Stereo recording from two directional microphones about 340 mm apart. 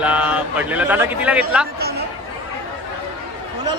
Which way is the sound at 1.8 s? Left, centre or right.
Right.